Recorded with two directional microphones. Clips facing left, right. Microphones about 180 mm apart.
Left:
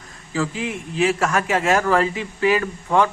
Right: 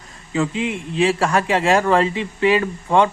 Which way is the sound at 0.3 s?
25° right (ahead or behind).